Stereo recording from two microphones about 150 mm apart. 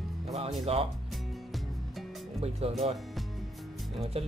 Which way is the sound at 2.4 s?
45° right (ahead or behind).